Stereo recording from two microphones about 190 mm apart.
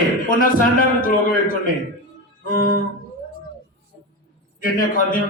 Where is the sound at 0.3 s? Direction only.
45° left (ahead or behind).